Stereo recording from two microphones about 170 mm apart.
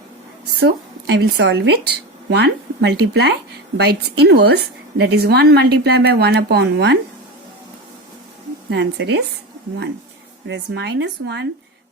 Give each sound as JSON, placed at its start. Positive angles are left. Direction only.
{"t": 0.6, "sound": "a woman's voice", "side_deg": -75}
{"t": 3.8, "sound": "a woman's voice", "side_deg": -75}
{"t": 8.7, "sound": "speech", "side_deg": -90}
{"t": 10.4, "sound": "speech", "side_deg": -90}